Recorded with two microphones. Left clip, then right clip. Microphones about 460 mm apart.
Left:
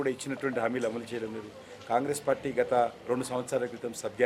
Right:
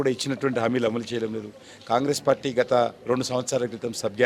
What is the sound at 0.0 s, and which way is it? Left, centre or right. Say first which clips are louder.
Speech: right 7 dB; right.